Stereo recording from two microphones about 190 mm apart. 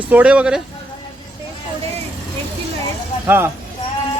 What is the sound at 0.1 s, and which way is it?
Speech, 5° right (ahead or behind).